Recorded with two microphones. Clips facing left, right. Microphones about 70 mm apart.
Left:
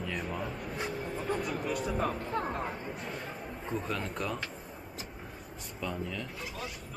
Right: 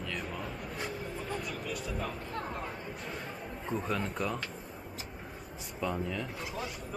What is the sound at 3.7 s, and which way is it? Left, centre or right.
Speech, centre.